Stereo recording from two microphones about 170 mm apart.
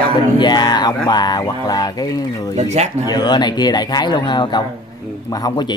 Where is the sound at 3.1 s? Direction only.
25° left (ahead or behind).